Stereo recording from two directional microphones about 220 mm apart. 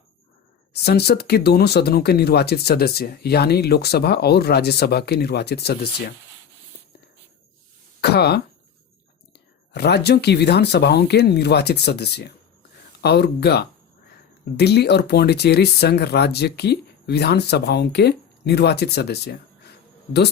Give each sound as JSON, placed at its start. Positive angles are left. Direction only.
{"t": 0.7, "sound": "speech", "side_deg": 50}
{"t": 8.0, "sound": "speech", "side_deg": 45}
{"t": 9.7, "sound": "speech", "side_deg": 50}